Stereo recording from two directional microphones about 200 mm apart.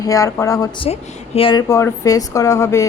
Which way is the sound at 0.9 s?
25° left (ahead or behind).